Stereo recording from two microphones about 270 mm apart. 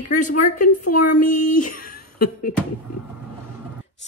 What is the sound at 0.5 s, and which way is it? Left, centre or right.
Speech, left.